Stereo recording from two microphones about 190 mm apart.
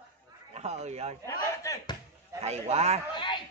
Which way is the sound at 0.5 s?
35° right (ahead or behind).